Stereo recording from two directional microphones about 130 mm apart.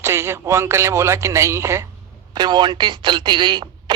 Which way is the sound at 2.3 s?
35° right (ahead or behind).